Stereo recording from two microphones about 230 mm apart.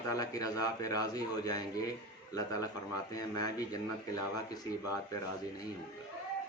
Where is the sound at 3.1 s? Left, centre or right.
Centre.